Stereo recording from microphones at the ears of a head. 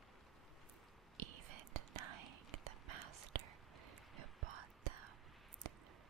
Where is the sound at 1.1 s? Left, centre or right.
Right.